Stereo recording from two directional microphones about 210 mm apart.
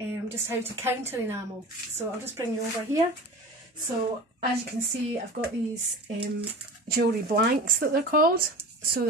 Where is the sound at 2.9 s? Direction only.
35° right (ahead or behind).